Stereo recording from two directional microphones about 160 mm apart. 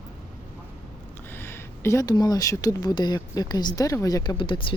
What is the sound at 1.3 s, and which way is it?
Speech, 15° left (ahead or behind).